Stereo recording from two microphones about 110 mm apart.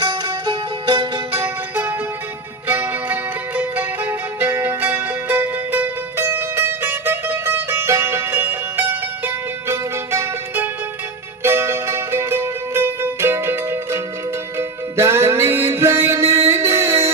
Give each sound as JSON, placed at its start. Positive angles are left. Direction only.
{"t": 0.0, "sound": "music", "side_deg": -45}
{"t": 1.4, "sound": "music", "side_deg": -15}